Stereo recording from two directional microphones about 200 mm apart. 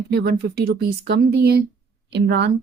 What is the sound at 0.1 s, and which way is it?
Speech, 50° right (ahead or behind).